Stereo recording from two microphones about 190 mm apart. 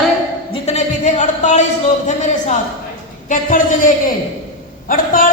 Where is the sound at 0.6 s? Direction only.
35° left (ahead or behind).